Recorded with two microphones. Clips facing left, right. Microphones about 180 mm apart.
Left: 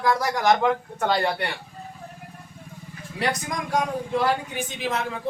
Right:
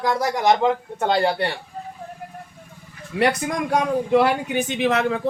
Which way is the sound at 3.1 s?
60° right (ahead or behind).